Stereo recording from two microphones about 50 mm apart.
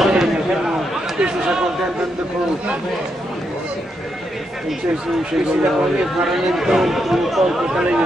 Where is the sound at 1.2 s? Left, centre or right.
Centre.